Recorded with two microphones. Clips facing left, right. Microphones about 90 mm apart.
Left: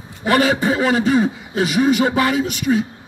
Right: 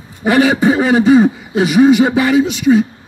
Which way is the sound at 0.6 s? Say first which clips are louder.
Right 6 dB; 60° right (ahead or behind).